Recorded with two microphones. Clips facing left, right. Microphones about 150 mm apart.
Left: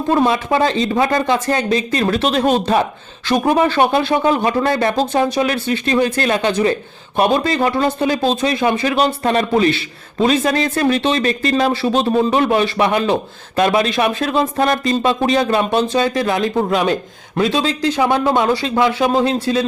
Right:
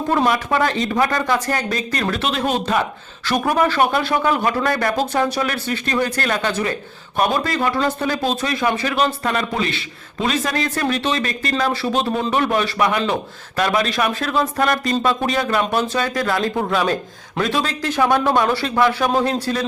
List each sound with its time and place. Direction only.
0.3 s a man's voice: 25° left (ahead or behind)
2.0 s a man's voice: 35° left (ahead or behind); by 5.5 s 20° left (ahead or behind)
5.6 s speech: 50° right (ahead or behind)
5.9 s a man's voice: 25° left (ahead or behind)